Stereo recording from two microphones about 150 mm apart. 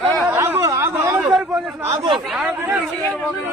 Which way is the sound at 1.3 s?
Centre (ahead or behind).